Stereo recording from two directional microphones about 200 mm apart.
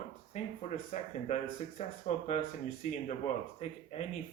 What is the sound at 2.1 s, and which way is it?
Speech, 35° left (ahead or behind).